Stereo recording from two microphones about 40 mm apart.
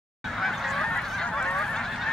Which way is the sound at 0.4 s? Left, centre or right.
Centre.